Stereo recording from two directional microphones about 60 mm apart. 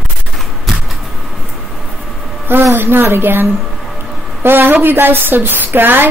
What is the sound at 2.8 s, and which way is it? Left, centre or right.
Speech, right.